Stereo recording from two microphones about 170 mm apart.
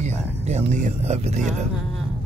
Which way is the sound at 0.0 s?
40° right (ahead or behind).